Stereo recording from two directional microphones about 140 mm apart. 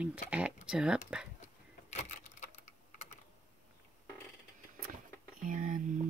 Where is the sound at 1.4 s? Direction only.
55° left (ahead or behind).